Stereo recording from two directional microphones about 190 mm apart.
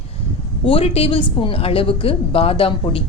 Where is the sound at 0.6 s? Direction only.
30° left (ahead or behind).